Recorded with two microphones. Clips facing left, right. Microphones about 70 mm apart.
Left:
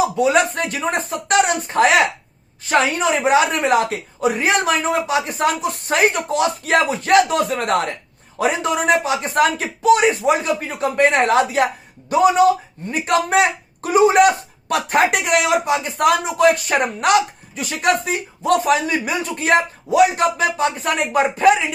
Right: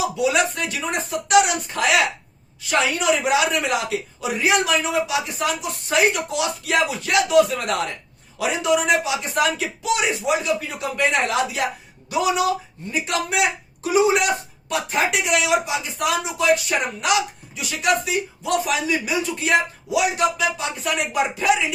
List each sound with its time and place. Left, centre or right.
0.2 s speech: left